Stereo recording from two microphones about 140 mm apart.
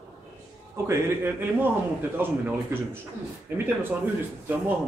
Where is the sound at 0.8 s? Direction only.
15° right (ahead or behind).